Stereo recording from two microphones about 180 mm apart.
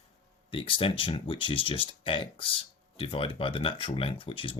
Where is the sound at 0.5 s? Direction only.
30° left (ahead or behind).